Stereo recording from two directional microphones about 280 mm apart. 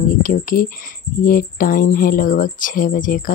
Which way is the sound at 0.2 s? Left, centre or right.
Left.